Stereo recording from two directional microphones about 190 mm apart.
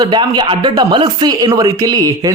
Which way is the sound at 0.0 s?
25° right (ahead or behind).